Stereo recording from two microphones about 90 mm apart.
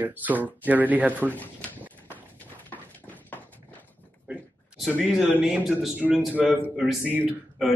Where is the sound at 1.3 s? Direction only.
20° left (ahead or behind).